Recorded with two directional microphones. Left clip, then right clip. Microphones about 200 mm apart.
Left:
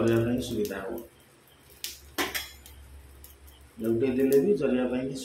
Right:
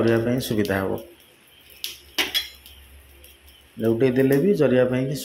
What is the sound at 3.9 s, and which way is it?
Speech, 35° right (ahead or behind).